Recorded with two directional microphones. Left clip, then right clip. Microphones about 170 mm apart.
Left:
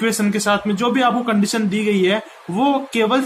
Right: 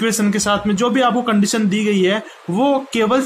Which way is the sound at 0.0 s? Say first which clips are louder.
Right 1 dB; 15° right (ahead or behind).